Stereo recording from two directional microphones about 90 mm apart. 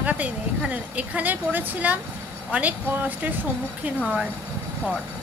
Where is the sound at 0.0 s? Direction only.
15° right (ahead or behind).